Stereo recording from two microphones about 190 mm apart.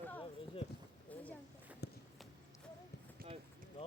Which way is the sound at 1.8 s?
60° left (ahead or behind).